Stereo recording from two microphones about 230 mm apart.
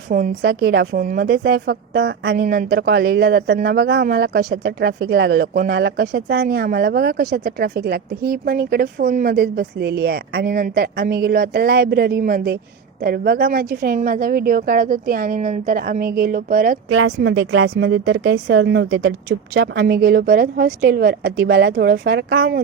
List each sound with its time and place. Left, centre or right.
0.1 s a woman's voice: right
16.9 s a woman's voice: right